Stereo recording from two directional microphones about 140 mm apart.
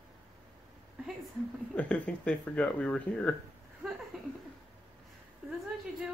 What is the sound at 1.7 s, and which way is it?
Speech, 10° left (ahead or behind).